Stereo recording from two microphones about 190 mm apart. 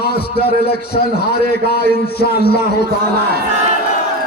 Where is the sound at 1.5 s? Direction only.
55° left (ahead or behind).